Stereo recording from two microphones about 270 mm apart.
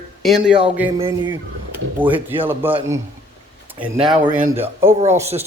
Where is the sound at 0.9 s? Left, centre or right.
Centre.